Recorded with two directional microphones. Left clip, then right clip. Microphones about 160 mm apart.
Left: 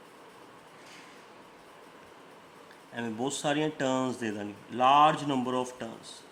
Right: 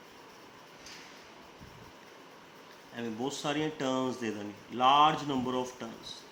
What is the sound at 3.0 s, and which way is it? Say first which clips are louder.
A man's voice: left 3 dB; 45° left (ahead or behind).